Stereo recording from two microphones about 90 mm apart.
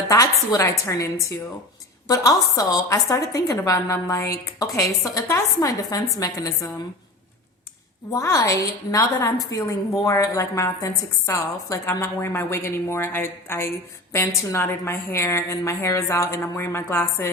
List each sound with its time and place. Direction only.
0.5 s a woman's voice: 40° left (ahead or behind)
8.1 s a woman's voice: 40° left (ahead or behind)